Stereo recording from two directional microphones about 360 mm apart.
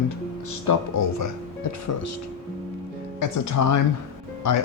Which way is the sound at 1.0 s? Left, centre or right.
Left.